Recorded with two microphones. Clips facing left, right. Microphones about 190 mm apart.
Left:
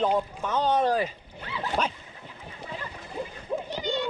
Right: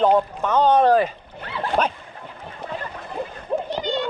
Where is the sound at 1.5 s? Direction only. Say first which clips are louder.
Right 6 dB; 60° right (ahead or behind).